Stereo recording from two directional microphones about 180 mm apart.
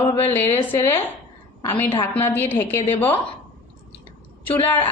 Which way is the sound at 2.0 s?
10° left (ahead or behind).